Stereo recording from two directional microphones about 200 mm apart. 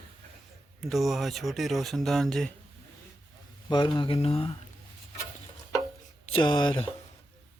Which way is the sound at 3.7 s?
25° left (ahead or behind).